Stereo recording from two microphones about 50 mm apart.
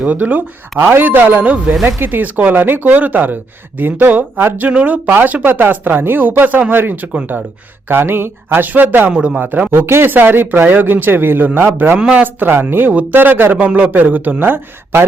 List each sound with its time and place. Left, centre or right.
0.0 s speech: right
0.8 s speech: right
7.9 s speech: right
8.6 s speech: right
9.1 s speech: centre
9.4 s speech: right
10.2 s speech: right
11.9 s speech: centre
12.2 s speech: right